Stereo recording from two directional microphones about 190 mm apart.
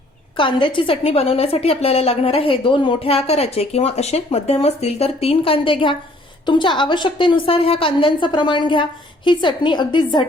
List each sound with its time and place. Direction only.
0.3 s a woman's voice: 25° left (ahead or behind)